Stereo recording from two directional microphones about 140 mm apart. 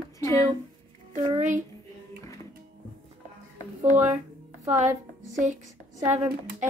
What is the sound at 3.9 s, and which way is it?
Speech, 15° right (ahead or behind).